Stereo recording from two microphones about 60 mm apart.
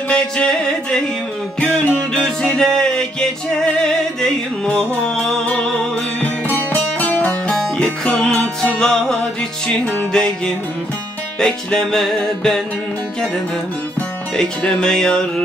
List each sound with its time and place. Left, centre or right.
0.1 s music: centre
6.2 s music: left
7.5 s music: centre
14.3 s music: centre